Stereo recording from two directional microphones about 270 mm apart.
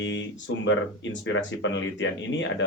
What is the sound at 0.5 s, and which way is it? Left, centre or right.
Speech, left.